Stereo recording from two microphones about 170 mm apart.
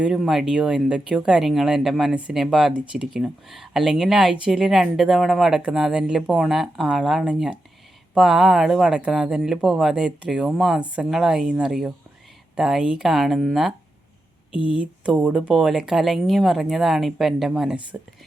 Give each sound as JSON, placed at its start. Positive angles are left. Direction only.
{"t": 0.0, "sound": "speech", "side_deg": 0}